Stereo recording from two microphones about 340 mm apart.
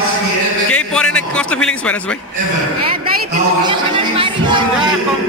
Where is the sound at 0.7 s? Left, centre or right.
Centre.